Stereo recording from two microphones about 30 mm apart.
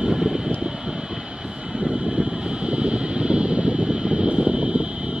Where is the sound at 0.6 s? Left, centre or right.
Centre.